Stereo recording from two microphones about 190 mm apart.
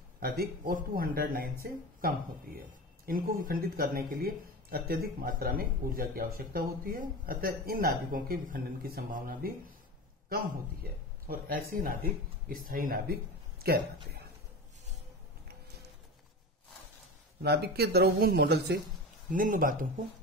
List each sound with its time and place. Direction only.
0.2 s speech: 50° right (ahead or behind)
17.4 s speech: 55° right (ahead or behind)
19.3 s speech: 45° right (ahead or behind)